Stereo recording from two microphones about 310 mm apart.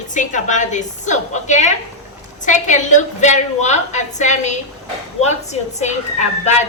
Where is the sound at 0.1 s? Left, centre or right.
Left.